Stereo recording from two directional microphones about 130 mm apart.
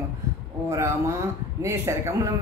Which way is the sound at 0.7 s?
20° right (ahead or behind).